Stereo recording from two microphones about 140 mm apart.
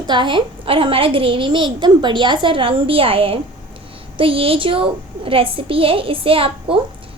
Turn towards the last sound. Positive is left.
turn(degrees=-40)  # may be behind; listen again after turning